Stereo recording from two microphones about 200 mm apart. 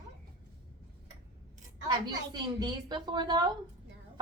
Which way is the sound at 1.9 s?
20° right (ahead or behind).